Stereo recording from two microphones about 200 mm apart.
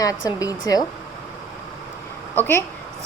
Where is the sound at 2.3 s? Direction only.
10° left (ahead or behind).